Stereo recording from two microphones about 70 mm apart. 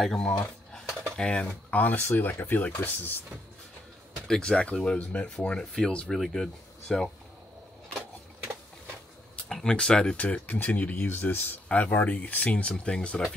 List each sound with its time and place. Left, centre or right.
0.0 s speech: centre; by 3.3 s left
4.3 s speech: centre
9.5 s speech: centre